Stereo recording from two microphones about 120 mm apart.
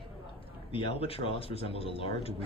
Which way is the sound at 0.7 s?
50° left (ahead or behind).